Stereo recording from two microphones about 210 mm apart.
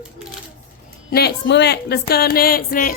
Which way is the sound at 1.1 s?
50° left (ahead or behind).